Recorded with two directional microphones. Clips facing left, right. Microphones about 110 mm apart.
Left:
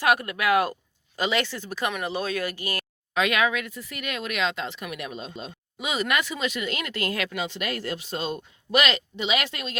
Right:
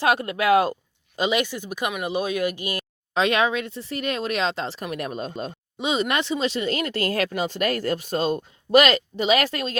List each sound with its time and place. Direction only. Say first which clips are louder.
0.0 s speech: right 2 dB; 25° right (ahead or behind)
3.2 s speech: right 3 dB; 30° right (ahead or behind); by 5.5 s 50° right (ahead or behind)
5.8 s speech: right 3 dB; 25° right (ahead or behind)